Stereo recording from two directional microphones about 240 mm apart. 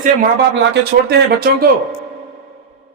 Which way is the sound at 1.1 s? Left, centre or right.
Right.